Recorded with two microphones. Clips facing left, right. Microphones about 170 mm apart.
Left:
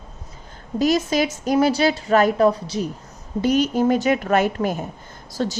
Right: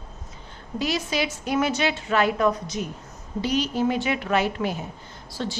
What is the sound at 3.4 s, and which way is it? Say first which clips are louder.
A woman's voice: left 5 dB; 50° left (ahead or behind).